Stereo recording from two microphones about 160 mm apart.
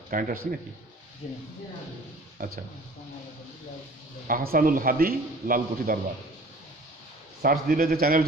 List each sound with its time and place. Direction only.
0.1 s a man's voice: 55° right (ahead or behind)
1.2 s speech: 45° left (ahead or behind)
2.4 s a man's voice: 60° right (ahead or behind)
4.3 s a man's voice: 60° right (ahead or behind)
7.4 s speech: 65° right (ahead or behind)